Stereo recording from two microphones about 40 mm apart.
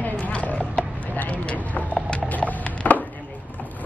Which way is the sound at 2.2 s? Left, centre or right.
Left.